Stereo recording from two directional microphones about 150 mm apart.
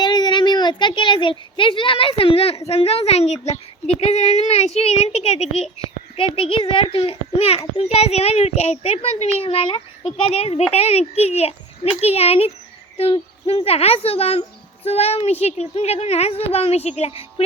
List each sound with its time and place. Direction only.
0.0 s a child's voice: 30° left (ahead or behind)